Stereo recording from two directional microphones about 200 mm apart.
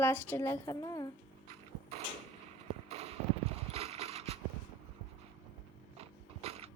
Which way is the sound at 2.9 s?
30° right (ahead or behind).